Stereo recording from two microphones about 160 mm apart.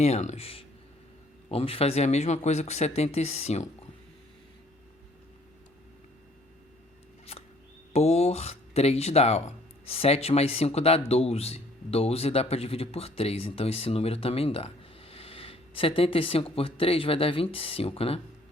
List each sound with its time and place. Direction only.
0.0 s speech: 45° left (ahead or behind)
7.3 s scissors: 40° left (ahead or behind)
7.9 s speech: 40° left (ahead or behind)